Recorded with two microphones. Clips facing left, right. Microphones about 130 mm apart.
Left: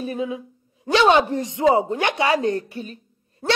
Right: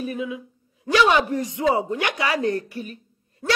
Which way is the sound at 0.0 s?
30° left (ahead or behind).